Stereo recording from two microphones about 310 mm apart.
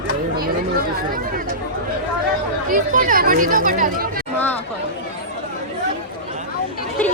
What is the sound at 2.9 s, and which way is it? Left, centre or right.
Speech, right.